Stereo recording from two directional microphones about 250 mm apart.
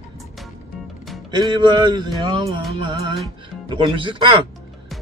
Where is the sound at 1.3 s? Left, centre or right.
Centre.